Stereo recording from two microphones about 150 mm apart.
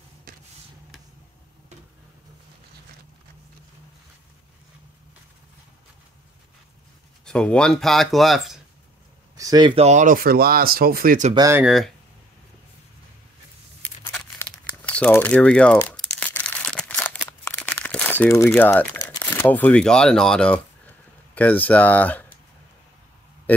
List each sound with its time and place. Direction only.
0.3 s a sound: 80° right
7.2 s speech: 5° left (ahead or behind)
9.4 s speech: 25° right (ahead or behind)
9.8 s speech: 50° right (ahead or behind); by 11.2 s 75° right (ahead or behind)
11.3 s speech: 20° right (ahead or behind)
11.6 s speech: centre (ahead or behind)
14.4 s crumpling: 10° left (ahead or behind)
21.4 s speech: 10° left (ahead or behind)